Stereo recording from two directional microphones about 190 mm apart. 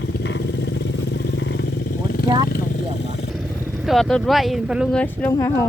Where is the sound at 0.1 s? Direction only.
70° left (ahead or behind); by 2.2 s 55° left (ahead or behind).